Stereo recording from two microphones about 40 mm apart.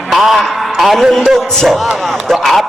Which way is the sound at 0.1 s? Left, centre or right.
Centre.